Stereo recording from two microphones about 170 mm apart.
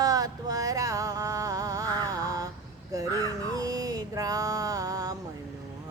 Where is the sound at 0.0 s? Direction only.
20° right (ahead or behind).